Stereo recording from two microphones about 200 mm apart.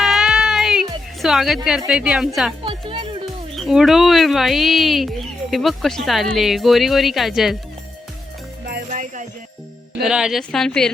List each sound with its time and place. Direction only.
0.0 s music: centre (ahead or behind)
1.9 s speech: 5° right (ahead or behind)
2.6 s music: 25° right (ahead or behind)
3.5 s speech: centre (ahead or behind)
8.6 s music: 45° right (ahead or behind)
10.0 s speech: 5° right (ahead or behind)